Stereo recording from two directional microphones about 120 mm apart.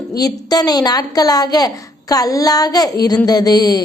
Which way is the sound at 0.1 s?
30° left (ahead or behind).